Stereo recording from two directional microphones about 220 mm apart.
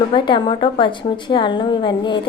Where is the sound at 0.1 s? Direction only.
20° left (ahead or behind).